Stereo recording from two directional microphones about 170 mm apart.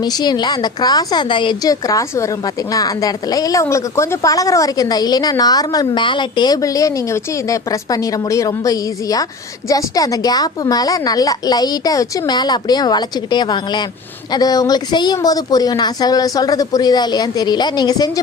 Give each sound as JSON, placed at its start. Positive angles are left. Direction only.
{"t": 0.0, "sound": "speech", "side_deg": 25}